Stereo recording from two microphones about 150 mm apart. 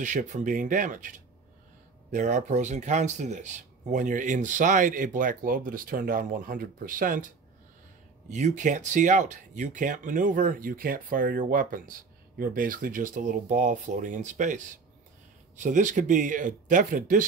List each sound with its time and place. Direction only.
0.0 s speech: 55° right (ahead or behind)
8.3 s speech: 50° right (ahead or behind)